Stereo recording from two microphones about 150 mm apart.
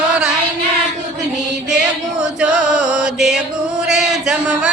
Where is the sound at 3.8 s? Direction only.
5° right (ahead or behind).